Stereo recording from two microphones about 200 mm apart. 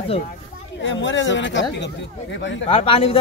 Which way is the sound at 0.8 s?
70° left (ahead or behind).